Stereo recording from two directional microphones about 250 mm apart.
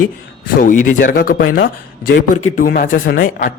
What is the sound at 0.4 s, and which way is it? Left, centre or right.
Speech, left.